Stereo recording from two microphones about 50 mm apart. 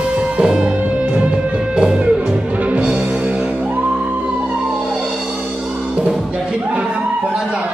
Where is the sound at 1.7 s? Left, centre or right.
Centre.